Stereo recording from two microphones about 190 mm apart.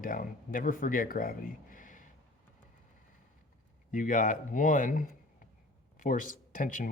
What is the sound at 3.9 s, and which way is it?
Speech, 45° left (ahead or behind).